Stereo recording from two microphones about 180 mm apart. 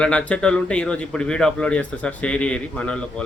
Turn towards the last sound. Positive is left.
turn(degrees=5)  # may be behind; listen again after turning